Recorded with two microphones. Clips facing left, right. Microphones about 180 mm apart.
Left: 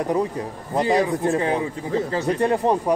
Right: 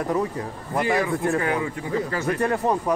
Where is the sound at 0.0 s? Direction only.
20° left (ahead or behind).